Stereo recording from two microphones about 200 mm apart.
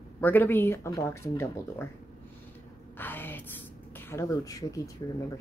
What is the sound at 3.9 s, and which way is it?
Speech, 10° left (ahead or behind).